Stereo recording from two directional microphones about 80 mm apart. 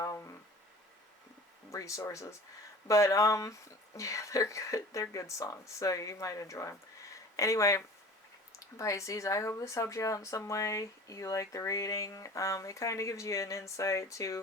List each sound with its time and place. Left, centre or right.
1.7 s speech: left